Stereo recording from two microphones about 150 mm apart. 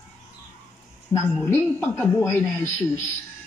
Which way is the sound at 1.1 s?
15° left (ahead or behind).